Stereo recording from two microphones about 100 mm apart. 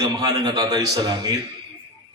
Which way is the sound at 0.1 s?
40° right (ahead or behind).